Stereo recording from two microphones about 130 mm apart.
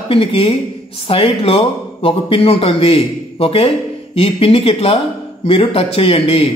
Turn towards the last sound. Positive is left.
turn(degrees=45)  # may be behind; listen again after turning